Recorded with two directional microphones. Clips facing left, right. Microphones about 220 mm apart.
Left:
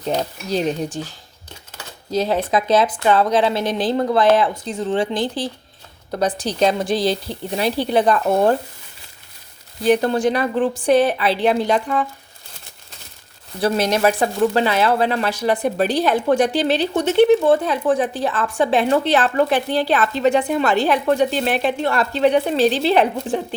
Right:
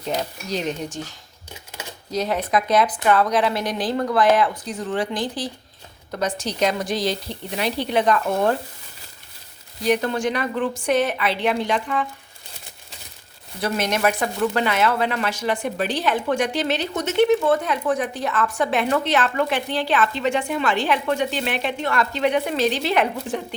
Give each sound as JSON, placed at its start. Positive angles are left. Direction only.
{"t": 0.0, "sound": "speech", "side_deg": 35}
{"t": 2.1, "sound": "speech", "side_deg": 30}
{"t": 9.8, "sound": "speech", "side_deg": 35}
{"t": 13.6, "sound": "speech", "side_deg": 35}